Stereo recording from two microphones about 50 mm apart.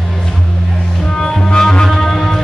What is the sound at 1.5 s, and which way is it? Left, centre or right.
Music, centre.